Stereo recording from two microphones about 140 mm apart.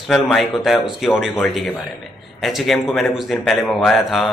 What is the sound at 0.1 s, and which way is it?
A man's voice, centre (ahead or behind).